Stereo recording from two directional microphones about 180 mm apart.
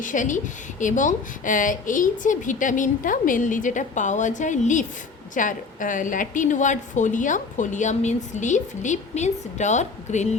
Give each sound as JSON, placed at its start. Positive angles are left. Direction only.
{"t": 0.0, "sound": "a woman's voice", "side_deg": 45}